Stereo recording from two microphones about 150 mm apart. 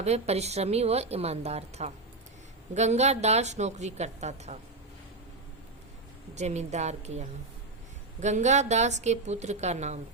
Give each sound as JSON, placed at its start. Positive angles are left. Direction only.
{"t": 0.0, "sound": "a woman's voice", "side_deg": -45}
{"t": 6.3, "sound": "a woman's voice", "side_deg": -50}